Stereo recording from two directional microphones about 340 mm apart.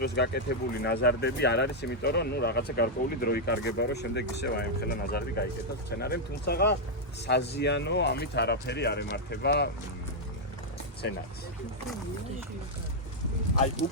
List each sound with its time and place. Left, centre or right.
0.0 s speech: left